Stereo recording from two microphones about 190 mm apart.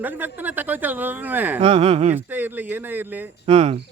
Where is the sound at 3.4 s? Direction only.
30° right (ahead or behind).